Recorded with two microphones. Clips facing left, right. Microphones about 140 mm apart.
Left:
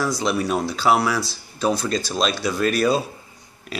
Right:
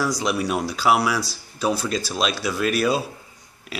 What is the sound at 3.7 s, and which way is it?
Pig, 5° right (ahead or behind).